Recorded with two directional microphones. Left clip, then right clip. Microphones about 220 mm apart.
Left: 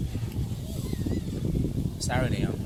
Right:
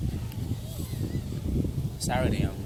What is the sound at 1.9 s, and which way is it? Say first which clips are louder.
Speech: right 2 dB; 15° right (ahead or behind).